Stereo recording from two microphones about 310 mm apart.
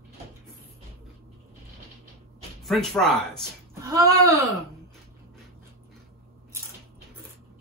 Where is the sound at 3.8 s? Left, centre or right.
Centre.